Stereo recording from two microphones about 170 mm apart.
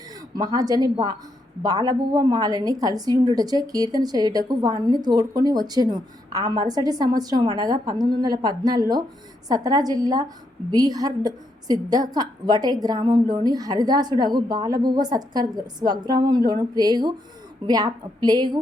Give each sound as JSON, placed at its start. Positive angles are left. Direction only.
{"t": 0.1, "sound": "a woman's voice", "side_deg": -20}